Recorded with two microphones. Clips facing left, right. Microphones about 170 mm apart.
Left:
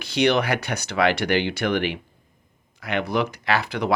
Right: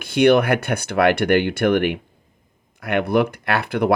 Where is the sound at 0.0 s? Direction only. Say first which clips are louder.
Right 6 dB; 55° right (ahead or behind).